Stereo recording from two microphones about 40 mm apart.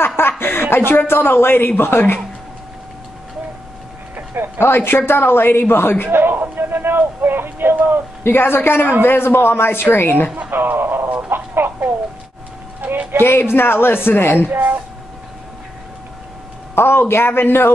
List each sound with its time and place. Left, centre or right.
0.0 s chuckle: left
1.8 s a man's voice: left
4.6 s a man's voice: left
6.3 s speech: right
8.2 s a man's voice: left
10.5 s a man's voice: right
13.2 s a man's voice: left
14.5 s speech: right
16.7 s a man's voice: left